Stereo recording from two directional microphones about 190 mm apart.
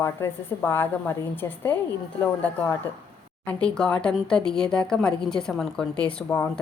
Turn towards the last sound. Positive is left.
turn(degrees=10)  # may be behind; listen again after turning